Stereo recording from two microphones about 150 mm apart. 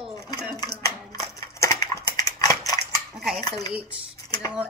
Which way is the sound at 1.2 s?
20° left (ahead or behind).